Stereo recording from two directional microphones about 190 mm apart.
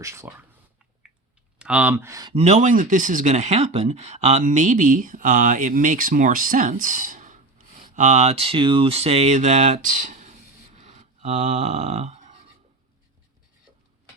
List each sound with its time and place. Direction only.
0.0 s speech: 15° right (ahead or behind)
1.5 s speech: 5° right (ahead or behind)
2.3 s speech: 35° right (ahead or behind)
10.8 s a sound: 35° right (ahead or behind)